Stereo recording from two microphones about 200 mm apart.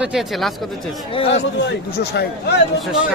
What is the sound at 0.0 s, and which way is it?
Speech, centre (ahead or behind).